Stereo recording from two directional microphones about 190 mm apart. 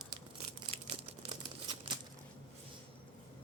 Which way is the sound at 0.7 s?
30° right (ahead or behind).